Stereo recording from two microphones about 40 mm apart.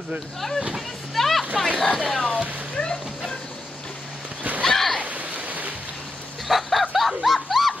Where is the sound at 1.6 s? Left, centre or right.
Centre.